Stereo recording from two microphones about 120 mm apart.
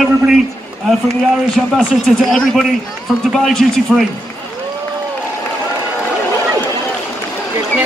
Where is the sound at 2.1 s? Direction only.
Centre (ahead or behind).